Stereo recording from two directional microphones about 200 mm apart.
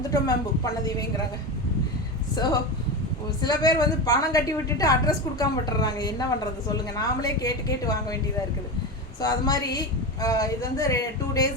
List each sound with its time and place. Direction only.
0.1 s a woman's voice: 15° left (ahead or behind)
2.3 s a woman's voice: 20° left (ahead or behind)
9.2 s a woman's voice: 20° left (ahead or behind)